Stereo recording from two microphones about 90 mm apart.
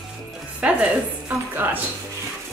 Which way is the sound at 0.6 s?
15° right (ahead or behind).